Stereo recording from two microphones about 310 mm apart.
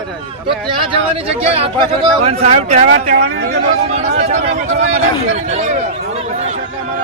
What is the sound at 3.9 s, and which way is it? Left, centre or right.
Speech, right.